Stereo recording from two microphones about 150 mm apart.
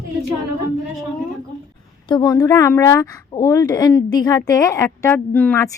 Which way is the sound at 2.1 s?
25° left (ahead or behind).